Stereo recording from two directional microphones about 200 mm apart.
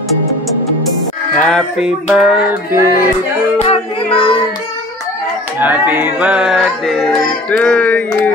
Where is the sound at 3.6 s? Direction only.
30° left (ahead or behind).